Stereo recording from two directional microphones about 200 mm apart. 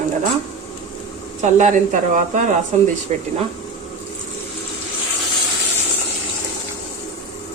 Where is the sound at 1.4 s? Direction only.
35° right (ahead or behind).